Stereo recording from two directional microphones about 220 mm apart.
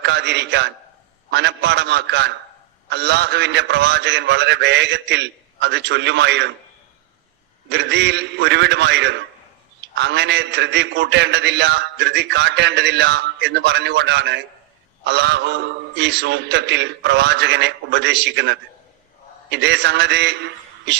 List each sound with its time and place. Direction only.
0.0 s a man's voice: 50° right (ahead or behind)
7.7 s a man's voice: 50° right (ahead or behind)